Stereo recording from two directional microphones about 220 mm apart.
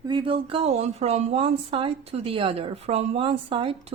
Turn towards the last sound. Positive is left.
turn(degrees=-25)  # may be behind; listen again after turning